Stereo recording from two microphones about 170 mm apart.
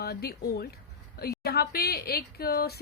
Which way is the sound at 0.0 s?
65° left (ahead or behind).